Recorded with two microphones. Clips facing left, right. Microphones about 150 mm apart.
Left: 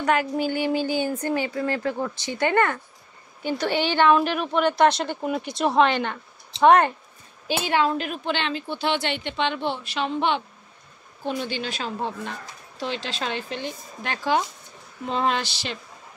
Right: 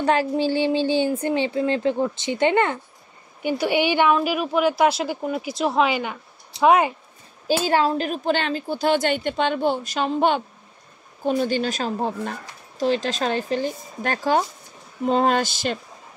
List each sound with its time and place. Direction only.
0.0 s a woman's voice: 30° right (ahead or behind); by 6.9 s 5° right (ahead or behind)
7.4 s speech: 40° right (ahead or behind)